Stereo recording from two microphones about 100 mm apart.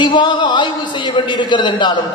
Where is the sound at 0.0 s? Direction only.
50° left (ahead or behind).